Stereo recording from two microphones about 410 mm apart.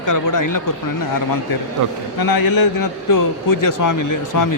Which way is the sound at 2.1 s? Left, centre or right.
Left.